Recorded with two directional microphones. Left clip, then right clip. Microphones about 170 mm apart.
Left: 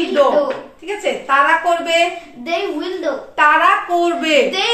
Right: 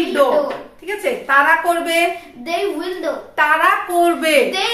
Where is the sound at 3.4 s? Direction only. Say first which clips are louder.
Left 2 dB; 30° right (ahead or behind).